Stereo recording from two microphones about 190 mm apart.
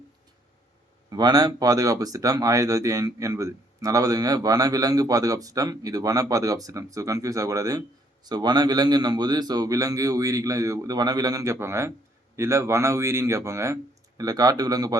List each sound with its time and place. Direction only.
1.1 s speech: 20° right (ahead or behind)